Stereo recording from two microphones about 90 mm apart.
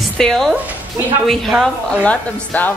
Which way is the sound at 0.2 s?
5° left (ahead or behind).